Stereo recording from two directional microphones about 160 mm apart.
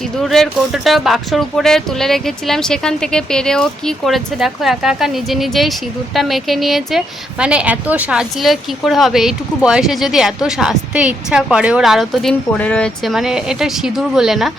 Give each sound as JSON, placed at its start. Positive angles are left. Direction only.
{"t": 0.2, "sound": "a woman's voice", "side_deg": 0}